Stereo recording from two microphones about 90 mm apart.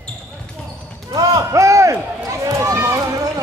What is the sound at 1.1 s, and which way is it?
Run, 40° right (ahead or behind).